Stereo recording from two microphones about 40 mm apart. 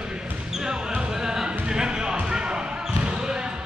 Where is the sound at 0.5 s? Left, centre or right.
Centre.